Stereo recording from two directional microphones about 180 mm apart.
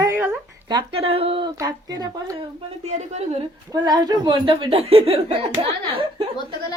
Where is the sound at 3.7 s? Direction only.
20° right (ahead or behind).